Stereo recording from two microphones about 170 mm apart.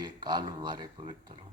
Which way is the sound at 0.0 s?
25° right (ahead or behind).